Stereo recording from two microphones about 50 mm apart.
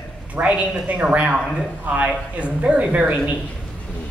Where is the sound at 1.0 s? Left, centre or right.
Right.